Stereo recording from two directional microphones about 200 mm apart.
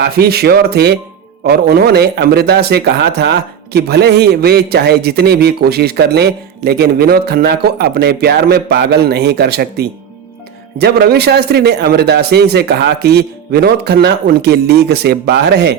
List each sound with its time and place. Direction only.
0.0 s speech: 50° right (ahead or behind)